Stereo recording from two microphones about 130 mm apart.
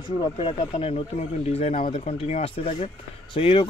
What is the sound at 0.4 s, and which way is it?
Speech, 45° left (ahead or behind).